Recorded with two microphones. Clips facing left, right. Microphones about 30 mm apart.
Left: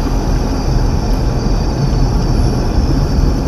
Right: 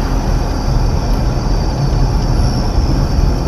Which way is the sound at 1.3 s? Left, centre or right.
Centre.